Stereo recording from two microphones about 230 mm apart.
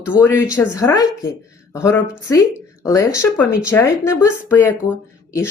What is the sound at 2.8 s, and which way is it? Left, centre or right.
Speech, centre.